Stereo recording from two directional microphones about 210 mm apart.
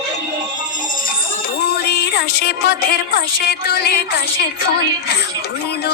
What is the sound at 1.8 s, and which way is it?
Music, 50° left (ahead or behind).